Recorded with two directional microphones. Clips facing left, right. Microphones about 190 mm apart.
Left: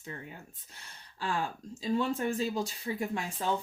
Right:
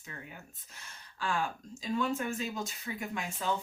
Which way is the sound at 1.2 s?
30° left (ahead or behind).